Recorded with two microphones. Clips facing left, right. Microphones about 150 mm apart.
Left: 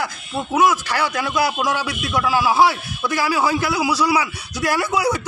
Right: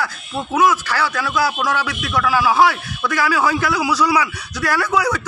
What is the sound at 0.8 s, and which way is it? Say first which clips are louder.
A man's voice: right 1 dB; 20° left (ahead or behind).